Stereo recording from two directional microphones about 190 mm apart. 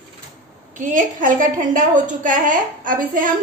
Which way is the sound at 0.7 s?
45° right (ahead or behind).